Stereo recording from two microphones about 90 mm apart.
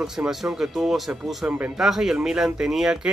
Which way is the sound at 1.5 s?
15° right (ahead or behind).